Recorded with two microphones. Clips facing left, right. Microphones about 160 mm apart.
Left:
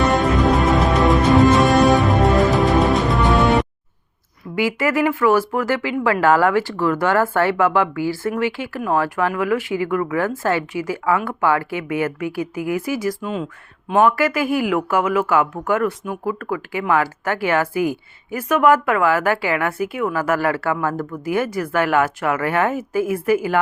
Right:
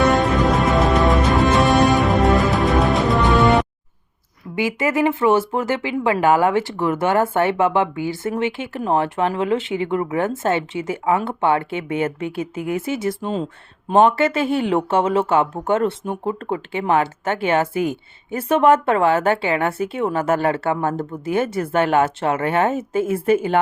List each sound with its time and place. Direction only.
0.0 s music: centre (ahead or behind)
4.5 s speech: 20° right (ahead or behind)